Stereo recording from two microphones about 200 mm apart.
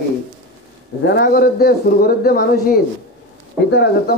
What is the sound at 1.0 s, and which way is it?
Speech, 50° left (ahead or behind).